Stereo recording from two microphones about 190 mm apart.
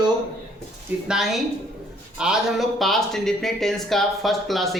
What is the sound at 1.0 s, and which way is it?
Speech, centre (ahead or behind).